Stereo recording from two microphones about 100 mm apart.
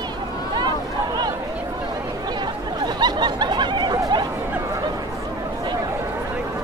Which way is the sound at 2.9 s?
45° right (ahead or behind).